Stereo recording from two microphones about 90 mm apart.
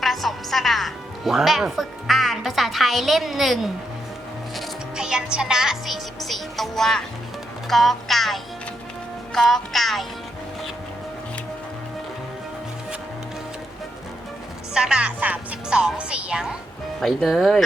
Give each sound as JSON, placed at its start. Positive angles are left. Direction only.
{"t": 0.0, "sound": "a woman's voice", "side_deg": 0}
{"t": 7.7, "sound": "music", "side_deg": 0}
{"t": 14.7, "sound": "speech", "side_deg": -5}
{"t": 17.0, "sound": "music", "side_deg": 0}